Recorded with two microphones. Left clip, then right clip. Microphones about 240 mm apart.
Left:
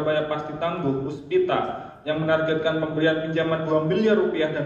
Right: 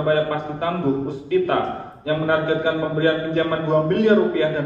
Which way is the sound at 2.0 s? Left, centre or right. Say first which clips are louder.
Right 2 dB; left.